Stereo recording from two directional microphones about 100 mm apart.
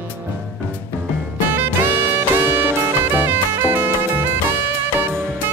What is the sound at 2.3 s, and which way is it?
Music, 20° right (ahead or behind).